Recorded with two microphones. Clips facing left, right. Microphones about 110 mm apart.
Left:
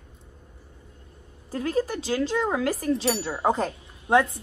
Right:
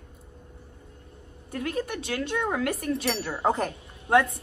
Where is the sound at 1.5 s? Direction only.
30° left (ahead or behind).